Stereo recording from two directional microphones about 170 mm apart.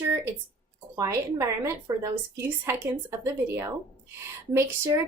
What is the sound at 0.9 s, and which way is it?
Speech, 20° right (ahead or behind).